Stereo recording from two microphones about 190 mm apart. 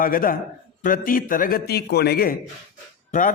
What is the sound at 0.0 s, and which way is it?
A man's voice, 50° left (ahead or behind).